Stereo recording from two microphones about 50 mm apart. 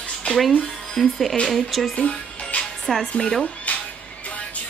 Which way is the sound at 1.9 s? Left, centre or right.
Left.